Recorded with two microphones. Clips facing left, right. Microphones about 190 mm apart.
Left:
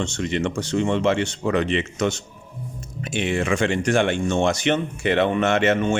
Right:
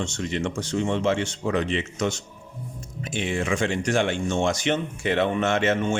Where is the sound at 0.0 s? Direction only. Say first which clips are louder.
Left 3 dB; 70° left (ahead or behind).